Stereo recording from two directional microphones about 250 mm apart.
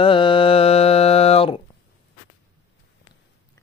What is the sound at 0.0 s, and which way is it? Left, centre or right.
Mantra, centre.